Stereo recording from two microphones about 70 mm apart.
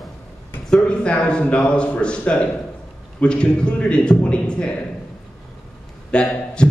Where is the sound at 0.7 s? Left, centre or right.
Centre.